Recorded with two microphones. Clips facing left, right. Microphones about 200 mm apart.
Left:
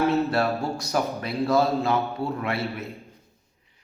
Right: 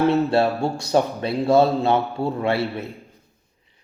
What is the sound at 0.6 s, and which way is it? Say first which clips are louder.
Speech: right 6 dB; 30° right (ahead or behind).